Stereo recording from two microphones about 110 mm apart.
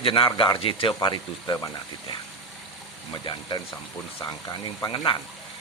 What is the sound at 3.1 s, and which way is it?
Speech, 40° left (ahead or behind).